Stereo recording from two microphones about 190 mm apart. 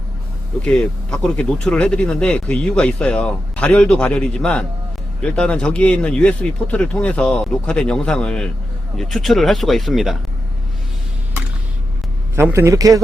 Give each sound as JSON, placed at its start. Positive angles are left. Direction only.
{"t": 0.6, "sound": "speech", "side_deg": 5}
{"t": 12.4, "sound": "a man's voice", "side_deg": -15}